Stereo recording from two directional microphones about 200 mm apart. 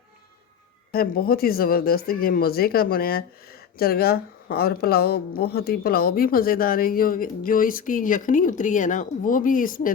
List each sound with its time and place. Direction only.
0.9 s a woman's voice: 50° left (ahead or behind)